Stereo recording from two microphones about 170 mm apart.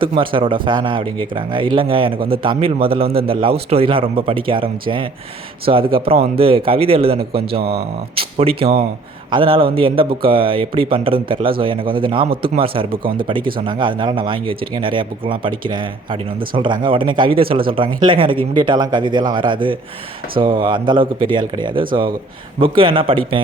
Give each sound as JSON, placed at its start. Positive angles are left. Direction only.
{"t": 0.0, "sound": "speech", "side_deg": -30}
{"t": 13.0, "sound": "speech", "side_deg": -55}
{"t": 13.6, "sound": "speech", "side_deg": -30}